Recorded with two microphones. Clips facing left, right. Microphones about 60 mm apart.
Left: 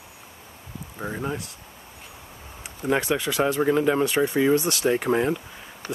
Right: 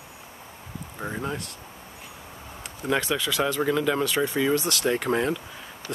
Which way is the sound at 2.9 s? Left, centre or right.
Left.